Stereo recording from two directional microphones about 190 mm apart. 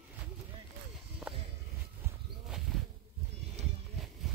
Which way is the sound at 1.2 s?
5° right (ahead or behind).